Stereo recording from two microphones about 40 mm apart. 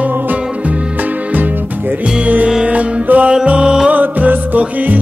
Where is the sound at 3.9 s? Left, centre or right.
Right.